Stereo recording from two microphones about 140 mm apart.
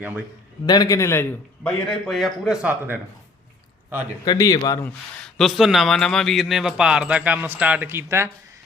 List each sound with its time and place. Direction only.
0.0 s a man's voice: 10° right (ahead or behind)
0.6 s a man's voice: 30° left (ahead or behind)
1.9 s speech: centre (ahead or behind)
4.3 s a man's voice: 30° left (ahead or behind)
4.8 s speech: 5° left (ahead or behind); by 8.3 s 20° right (ahead or behind)